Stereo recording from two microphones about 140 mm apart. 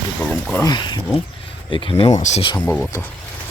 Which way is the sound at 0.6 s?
30° left (ahead or behind).